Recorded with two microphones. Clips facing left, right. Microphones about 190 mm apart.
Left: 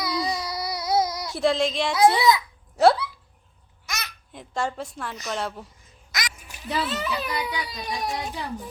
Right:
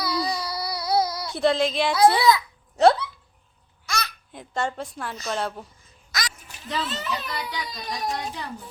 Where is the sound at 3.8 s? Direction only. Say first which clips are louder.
Right 6 dB; 20° left (ahead or behind).